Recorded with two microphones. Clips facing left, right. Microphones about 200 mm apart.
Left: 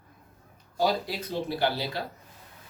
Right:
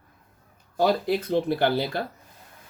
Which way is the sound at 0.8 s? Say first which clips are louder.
Right 5 dB; 55° right (ahead or behind).